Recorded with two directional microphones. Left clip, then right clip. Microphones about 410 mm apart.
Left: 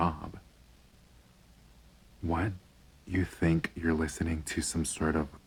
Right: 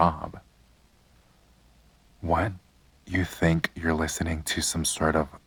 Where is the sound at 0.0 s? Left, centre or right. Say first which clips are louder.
Right 8 dB; centre.